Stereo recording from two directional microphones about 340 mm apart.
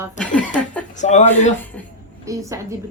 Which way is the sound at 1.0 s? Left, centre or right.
Left.